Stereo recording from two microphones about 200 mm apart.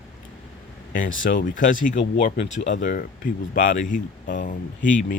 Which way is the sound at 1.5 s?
40° left (ahead or behind).